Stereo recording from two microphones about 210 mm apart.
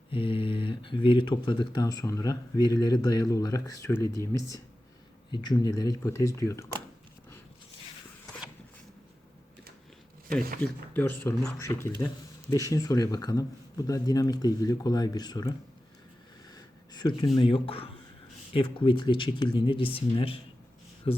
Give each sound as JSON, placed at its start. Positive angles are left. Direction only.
{"t": 0.1, "sound": "speech", "side_deg": 25}
{"t": 10.6, "sound": "speech", "side_deg": 10}
{"t": 16.5, "sound": "a sound", "side_deg": 20}
{"t": 17.3, "sound": "speech", "side_deg": 25}